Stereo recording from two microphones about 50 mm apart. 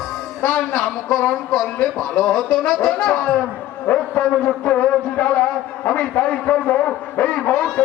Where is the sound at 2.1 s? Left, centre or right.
Centre.